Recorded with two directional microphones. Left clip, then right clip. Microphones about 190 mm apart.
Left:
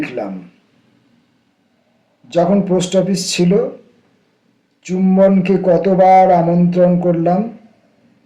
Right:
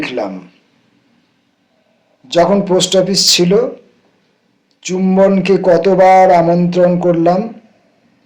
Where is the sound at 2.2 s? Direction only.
5° left (ahead or behind).